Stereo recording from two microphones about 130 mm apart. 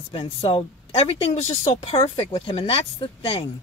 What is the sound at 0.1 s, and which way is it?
Speech, 40° left (ahead or behind).